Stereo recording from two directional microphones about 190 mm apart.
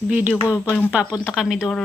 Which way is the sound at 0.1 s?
5° right (ahead or behind).